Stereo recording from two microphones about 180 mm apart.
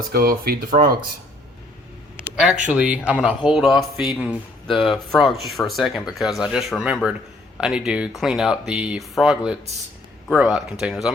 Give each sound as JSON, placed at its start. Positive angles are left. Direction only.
{"t": 0.1, "sound": "speech", "side_deg": -55}
{"t": 2.6, "sound": "speech", "side_deg": -5}